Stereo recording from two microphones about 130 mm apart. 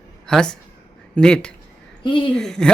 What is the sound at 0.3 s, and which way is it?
Speech, 5° left (ahead or behind).